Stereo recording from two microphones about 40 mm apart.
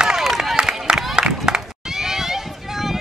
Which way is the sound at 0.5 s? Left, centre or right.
Right.